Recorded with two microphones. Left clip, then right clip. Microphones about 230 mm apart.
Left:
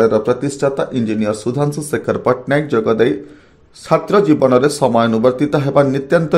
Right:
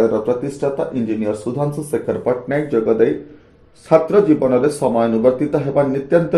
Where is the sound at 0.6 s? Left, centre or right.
Left.